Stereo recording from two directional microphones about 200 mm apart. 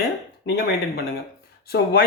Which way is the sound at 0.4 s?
50° left (ahead or behind).